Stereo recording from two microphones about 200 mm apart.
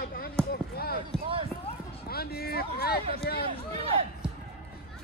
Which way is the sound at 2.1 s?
50° left (ahead or behind).